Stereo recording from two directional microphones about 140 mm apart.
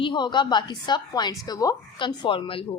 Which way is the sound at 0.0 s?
35° left (ahead or behind).